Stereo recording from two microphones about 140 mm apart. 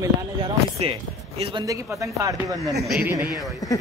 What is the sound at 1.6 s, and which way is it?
Speech, 25° right (ahead or behind).